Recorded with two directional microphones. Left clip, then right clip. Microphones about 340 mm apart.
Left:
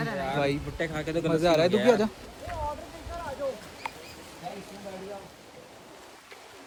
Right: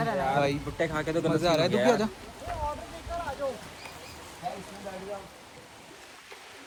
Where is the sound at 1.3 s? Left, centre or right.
Centre.